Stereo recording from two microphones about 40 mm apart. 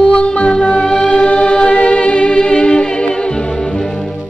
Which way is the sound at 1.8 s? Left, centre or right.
Left.